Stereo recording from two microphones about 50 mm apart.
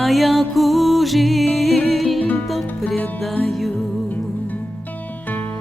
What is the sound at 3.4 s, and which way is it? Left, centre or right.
Music, centre.